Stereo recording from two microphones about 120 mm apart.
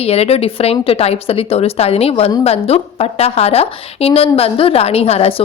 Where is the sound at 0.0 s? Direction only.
60° left (ahead or behind).